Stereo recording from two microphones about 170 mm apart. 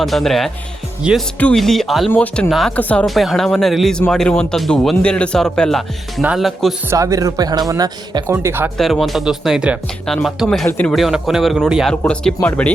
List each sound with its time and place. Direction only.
0.0 s speech: centre (ahead or behind)
1.4 s speech: 5° left (ahead or behind)
6.9 s speech: 20° right (ahead or behind)
8.8 s speech: centre (ahead or behind)